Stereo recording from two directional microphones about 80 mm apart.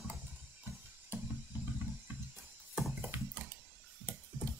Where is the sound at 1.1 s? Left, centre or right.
Right.